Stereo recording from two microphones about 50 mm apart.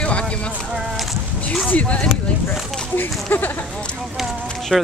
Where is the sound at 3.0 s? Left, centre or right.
Left.